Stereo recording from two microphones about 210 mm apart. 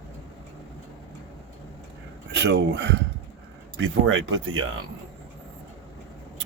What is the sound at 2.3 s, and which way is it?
Speech, 55° right (ahead or behind).